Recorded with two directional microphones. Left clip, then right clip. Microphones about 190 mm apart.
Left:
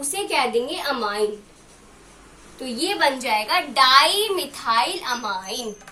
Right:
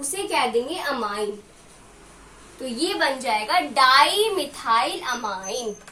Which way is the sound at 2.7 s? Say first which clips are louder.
Left 2 dB; 10° right (ahead or behind).